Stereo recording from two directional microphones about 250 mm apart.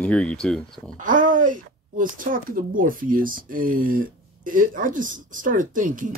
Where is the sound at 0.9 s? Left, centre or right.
Right.